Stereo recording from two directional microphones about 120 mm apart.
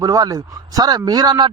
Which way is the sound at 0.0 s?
30° right (ahead or behind).